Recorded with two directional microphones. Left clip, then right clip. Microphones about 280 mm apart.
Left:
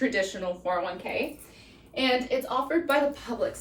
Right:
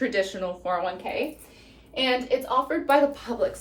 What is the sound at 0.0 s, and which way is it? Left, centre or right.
Speech, centre.